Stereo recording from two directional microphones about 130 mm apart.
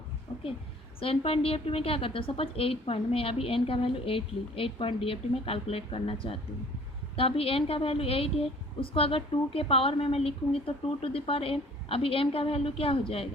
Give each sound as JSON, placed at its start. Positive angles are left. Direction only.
{"t": 0.9, "sound": "a woman's voice", "side_deg": 45}